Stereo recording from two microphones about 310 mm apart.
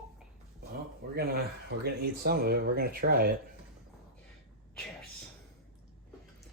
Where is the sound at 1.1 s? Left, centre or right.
Right.